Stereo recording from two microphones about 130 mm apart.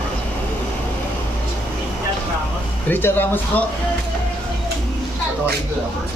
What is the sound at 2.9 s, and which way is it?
Speech, 15° left (ahead or behind).